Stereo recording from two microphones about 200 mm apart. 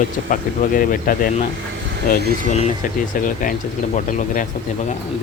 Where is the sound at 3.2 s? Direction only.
40° left (ahead or behind).